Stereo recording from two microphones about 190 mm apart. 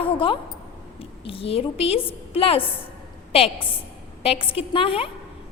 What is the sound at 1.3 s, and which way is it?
A woman's voice, 30° left (ahead or behind).